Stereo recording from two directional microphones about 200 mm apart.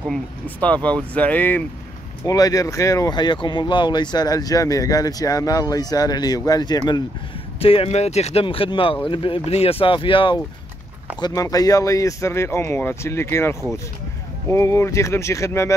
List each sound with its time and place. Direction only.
0.1 s speech: 5° left (ahead or behind)